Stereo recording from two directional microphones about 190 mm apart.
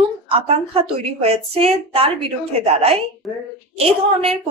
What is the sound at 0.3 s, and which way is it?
Speech, 30° right (ahead or behind).